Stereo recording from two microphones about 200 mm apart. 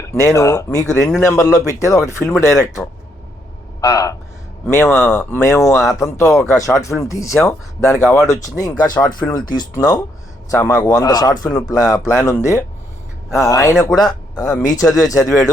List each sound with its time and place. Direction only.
0.0 s a man's voice: 15° left (ahead or behind)